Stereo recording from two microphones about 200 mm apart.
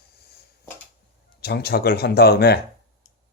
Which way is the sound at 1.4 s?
50° left (ahead or behind).